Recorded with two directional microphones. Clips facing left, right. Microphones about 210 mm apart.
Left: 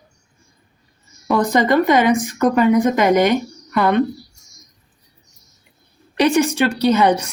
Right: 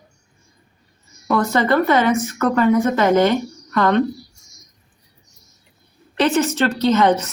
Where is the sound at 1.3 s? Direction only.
15° left (ahead or behind).